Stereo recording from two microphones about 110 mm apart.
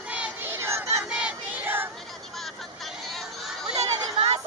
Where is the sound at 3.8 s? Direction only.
75° right (ahead or behind).